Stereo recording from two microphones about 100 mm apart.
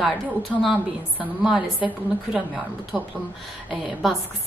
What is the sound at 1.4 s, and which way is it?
Speech, 5° right (ahead or behind).